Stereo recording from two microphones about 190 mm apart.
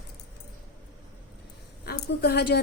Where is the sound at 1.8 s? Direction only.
55° left (ahead or behind).